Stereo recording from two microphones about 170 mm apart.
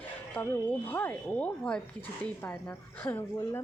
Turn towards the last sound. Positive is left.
turn(degrees=10)  # may be behind; listen again after turning